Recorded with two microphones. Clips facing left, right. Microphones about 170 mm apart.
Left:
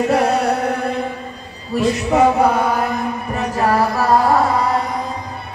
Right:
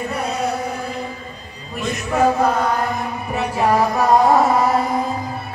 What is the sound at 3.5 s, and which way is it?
Music, 15° right (ahead or behind).